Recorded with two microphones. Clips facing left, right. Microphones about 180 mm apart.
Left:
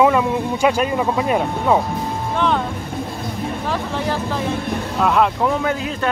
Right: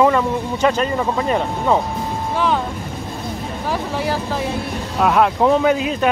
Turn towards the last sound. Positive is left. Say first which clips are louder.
# right 5 dB
turn(degrees=-15)  # may be behind; listen again after turning